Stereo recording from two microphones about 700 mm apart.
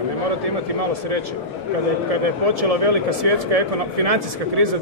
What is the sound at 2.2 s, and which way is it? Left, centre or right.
A man's voice, right.